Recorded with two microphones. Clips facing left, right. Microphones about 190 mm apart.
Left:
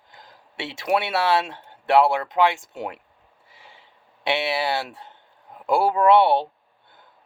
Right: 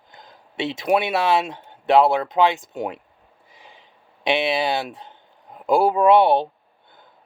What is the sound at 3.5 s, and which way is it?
Snort, 20° right (ahead or behind).